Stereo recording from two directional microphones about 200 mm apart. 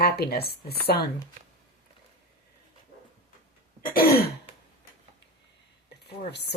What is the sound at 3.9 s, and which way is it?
Speech, 50° left (ahead or behind).